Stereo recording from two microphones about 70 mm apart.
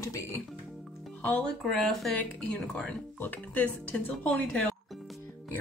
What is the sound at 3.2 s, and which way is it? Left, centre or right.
Speech, left.